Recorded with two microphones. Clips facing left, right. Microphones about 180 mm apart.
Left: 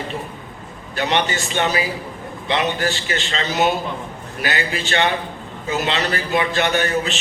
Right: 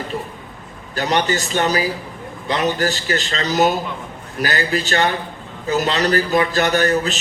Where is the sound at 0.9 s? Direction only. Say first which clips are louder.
Right 2 dB; 40° right (ahead or behind).